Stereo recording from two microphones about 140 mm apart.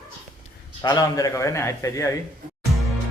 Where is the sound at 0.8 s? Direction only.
25° left (ahead or behind).